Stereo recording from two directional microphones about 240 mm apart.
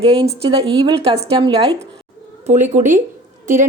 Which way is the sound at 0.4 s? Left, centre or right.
Right.